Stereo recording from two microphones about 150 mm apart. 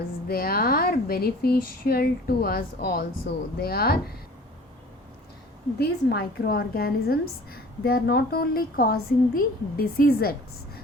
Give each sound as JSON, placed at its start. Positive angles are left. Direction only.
{"t": 0.3, "sound": "a woman's voice", "side_deg": 85}
{"t": 5.8, "sound": "a woman's voice", "side_deg": 90}